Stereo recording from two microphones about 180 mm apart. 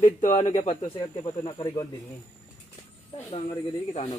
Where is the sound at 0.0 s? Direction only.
45° left (ahead or behind); by 1.9 s 25° left (ahead or behind).